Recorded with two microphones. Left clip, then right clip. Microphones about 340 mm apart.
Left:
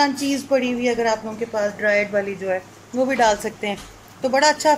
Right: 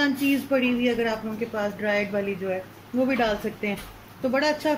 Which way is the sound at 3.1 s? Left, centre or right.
Left.